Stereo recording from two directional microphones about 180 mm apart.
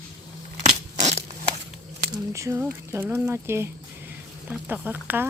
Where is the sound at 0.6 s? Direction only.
35° right (ahead or behind).